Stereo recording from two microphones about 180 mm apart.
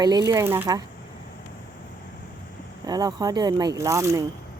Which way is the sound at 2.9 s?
20° right (ahead or behind).